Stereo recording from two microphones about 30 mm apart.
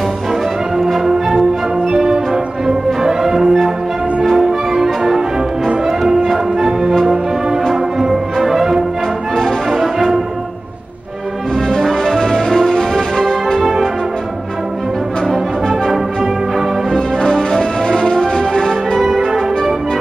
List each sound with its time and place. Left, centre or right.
0.7 s music: centre
1.9 s music: centre
6.2 s music: centre
8.1 s music: centre
12.0 s music: centre
13.6 s music: centre
15.2 s brass instrument: centre
17.4 s music: left
18.9 s music: centre